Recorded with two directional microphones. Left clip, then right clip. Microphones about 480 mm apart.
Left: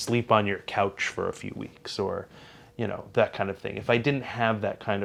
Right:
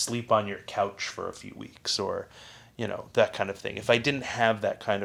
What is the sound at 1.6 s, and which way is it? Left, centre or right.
Speech, left.